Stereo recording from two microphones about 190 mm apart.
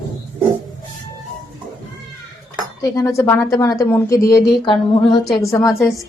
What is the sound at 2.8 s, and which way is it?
A woman's voice, 15° left (ahead or behind).